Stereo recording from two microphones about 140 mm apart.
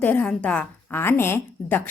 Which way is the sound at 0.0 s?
10° left (ahead or behind).